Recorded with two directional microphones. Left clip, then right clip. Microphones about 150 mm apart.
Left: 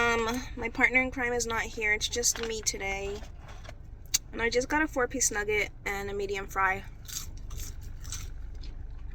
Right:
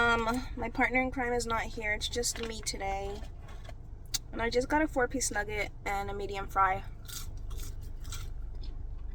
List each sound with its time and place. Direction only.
0.1 s a woman's voice: 25° right (ahead or behind)
3.1 s vehicle: 20° left (ahead or behind)
4.1 s speech: 25° right (ahead or behind)
4.9 s a sound: 20° right (ahead or behind)